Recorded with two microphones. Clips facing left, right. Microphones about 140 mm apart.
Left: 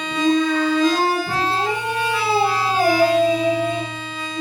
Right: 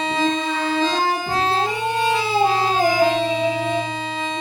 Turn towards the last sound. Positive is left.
turn(degrees=-25)  # may be behind; listen again after turning